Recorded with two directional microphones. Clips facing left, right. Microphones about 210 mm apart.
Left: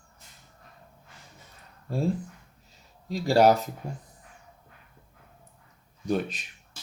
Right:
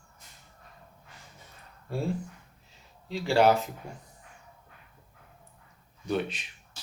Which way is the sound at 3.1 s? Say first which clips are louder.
Left 3 dB; 40° left (ahead or behind).